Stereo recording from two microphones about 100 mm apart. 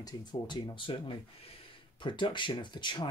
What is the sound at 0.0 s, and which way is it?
Speech, 45° left (ahead or behind).